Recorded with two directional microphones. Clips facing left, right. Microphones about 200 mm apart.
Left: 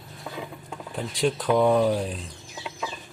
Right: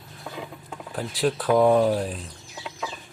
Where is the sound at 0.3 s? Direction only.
Centre (ahead or behind).